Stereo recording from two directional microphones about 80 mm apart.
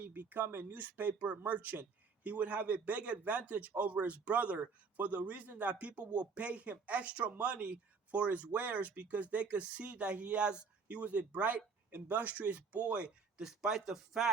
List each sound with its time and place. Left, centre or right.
0.0 s speech: right; by 14.3 s centre